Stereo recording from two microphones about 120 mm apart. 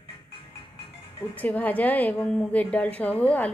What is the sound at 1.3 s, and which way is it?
A woman's voice, 15° left (ahead or behind).